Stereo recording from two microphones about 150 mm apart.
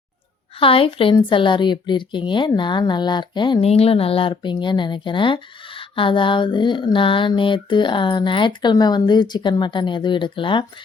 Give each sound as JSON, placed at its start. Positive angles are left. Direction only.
{"t": 0.6, "sound": "a woman's voice", "side_deg": 35}